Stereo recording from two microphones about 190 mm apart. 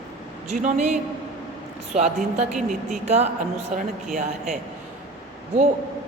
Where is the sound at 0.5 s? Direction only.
40° right (ahead or behind).